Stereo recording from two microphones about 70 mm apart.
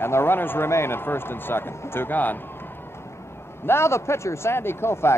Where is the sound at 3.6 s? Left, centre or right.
Left.